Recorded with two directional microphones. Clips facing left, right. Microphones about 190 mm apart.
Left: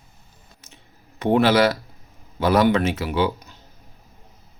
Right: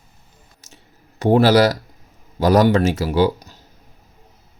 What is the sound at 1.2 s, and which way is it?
Speech, 40° right (ahead or behind).